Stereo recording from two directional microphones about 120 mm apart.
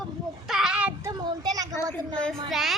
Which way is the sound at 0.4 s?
5° right (ahead or behind).